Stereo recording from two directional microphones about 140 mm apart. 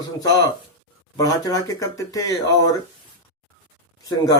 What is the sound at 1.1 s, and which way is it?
Speech, 25° left (ahead or behind).